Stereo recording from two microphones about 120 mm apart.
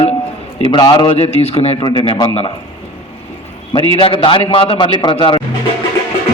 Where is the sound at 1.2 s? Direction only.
60° left (ahead or behind).